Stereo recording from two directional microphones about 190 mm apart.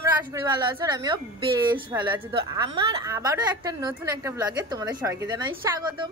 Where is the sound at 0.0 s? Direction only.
15° right (ahead or behind).